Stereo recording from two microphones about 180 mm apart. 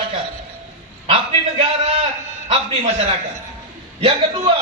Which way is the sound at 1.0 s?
30° right (ahead or behind).